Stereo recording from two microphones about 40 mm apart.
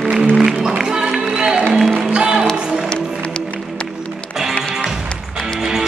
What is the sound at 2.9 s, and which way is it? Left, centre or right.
Music, left.